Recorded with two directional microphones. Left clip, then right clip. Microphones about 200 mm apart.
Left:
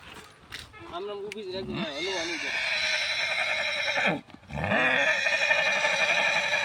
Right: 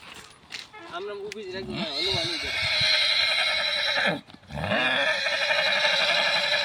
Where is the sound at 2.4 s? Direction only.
20° right (ahead or behind).